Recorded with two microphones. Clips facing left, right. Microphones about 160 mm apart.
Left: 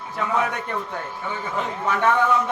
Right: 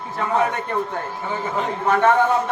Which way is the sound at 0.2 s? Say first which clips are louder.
Right 3 dB; 45° right (ahead or behind).